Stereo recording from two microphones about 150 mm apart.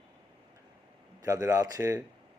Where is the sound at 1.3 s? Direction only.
20° right (ahead or behind).